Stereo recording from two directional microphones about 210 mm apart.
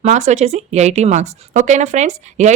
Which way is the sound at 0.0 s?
35° right (ahead or behind).